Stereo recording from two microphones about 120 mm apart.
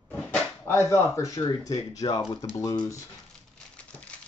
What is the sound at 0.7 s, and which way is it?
Speech, 20° left (ahead or behind).